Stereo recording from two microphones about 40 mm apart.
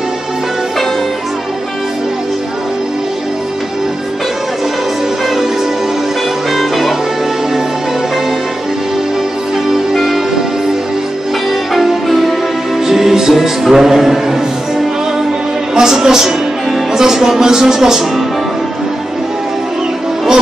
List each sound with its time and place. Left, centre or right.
6.5 s music: centre
9.9 s music: centre
11.7 s music: centre
16.9 s speech: centre